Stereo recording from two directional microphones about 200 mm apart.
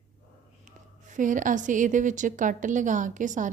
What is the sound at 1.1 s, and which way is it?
A woman's voice, 40° right (ahead or behind).